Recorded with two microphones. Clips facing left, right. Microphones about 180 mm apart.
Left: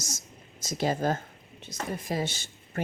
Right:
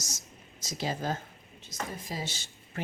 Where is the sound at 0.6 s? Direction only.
50° left (ahead or behind).